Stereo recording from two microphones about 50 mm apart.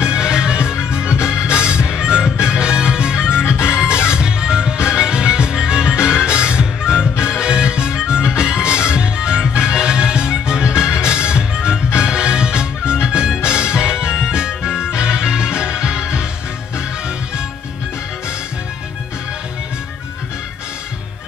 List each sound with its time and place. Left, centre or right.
0.0 s music: centre
3.6 s music: left
4.1 s music: centre
8.2 s music: left
8.5 s music: centre